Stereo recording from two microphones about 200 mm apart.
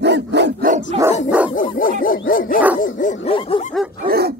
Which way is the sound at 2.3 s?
45° left (ahead or behind).